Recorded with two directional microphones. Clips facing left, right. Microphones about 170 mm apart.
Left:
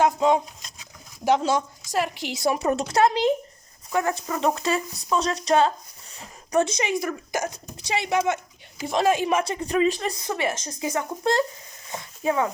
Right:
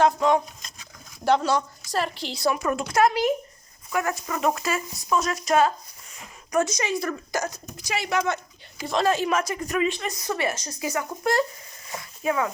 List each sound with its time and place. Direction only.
0.0 s speech: 20° left (ahead or behind)
1.4 s a woman's voice: 20° left (ahead or behind)
2.6 s a woman's voice: 35° left (ahead or behind); by 9.4 s 15° left (ahead or behind)
9.4 s speech: 30° left (ahead or behind)
11.9 s a sound: 25° left (ahead or behind)